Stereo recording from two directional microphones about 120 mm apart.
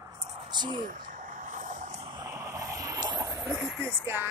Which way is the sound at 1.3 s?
90° right.